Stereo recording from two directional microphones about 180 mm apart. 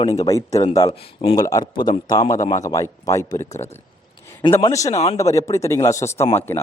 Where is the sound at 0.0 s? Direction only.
20° left (ahead or behind).